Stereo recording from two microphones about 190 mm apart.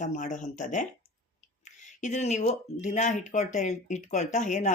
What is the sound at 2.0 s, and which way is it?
Speech, 40° left (ahead or behind).